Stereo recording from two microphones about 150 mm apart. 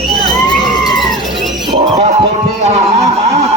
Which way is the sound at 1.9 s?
45° right (ahead or behind).